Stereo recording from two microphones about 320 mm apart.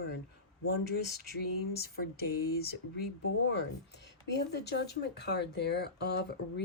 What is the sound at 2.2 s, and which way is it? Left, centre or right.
Speech, left.